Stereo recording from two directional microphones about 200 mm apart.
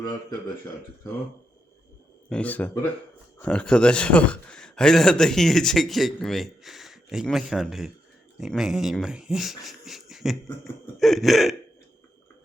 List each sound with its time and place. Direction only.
0.1 s speech: 20° left (ahead or behind)
2.3 s a man's voice: 5° left (ahead or behind)